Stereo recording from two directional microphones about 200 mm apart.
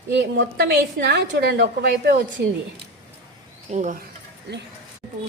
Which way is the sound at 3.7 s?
35° right (ahead or behind).